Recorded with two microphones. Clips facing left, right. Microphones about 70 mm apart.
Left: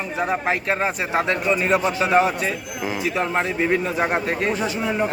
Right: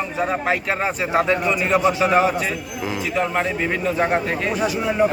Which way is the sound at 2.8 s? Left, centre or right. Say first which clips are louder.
Right 1 dB; left.